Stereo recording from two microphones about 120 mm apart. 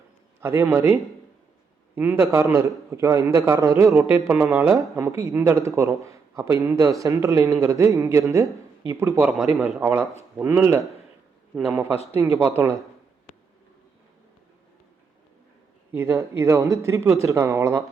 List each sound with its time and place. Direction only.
0.4 s speech: 20° right (ahead or behind)
10.2 s speech: 20° right (ahead or behind)
15.9 s speech: 20° right (ahead or behind)